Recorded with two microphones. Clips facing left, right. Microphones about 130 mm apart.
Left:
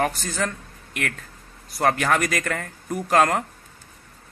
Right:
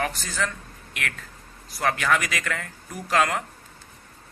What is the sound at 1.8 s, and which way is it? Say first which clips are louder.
A man's voice: left 3 dB; 45° left (ahead or behind).